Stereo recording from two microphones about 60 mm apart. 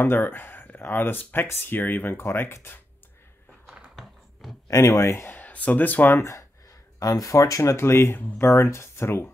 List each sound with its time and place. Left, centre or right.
0.0 s speech: left
3.6 s a sound: centre
3.9 s a sound: centre
4.6 s speech: left
5.3 s speech: left
6.1 s speech: left
7.0 s speech: left